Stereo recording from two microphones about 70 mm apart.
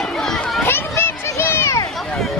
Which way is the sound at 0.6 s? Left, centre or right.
Left.